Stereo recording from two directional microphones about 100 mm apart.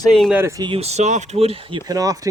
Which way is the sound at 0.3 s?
25° right (ahead or behind).